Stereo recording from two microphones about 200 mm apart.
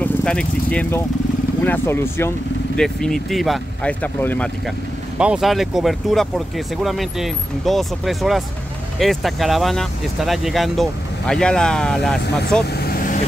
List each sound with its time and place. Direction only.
0.0 s speech: 5° left (ahead or behind)
5.2 s speech: 5° right (ahead or behind)
12.6 s vehicle: 50° left (ahead or behind)